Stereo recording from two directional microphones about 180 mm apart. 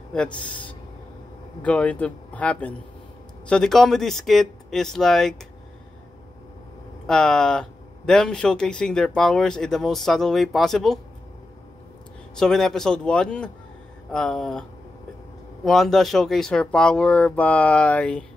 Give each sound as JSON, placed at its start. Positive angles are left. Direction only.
{"t": 0.1, "sound": "speech", "side_deg": 5}
{"t": 7.1, "sound": "speech", "side_deg": 5}
{"t": 12.4, "sound": "speech", "side_deg": 0}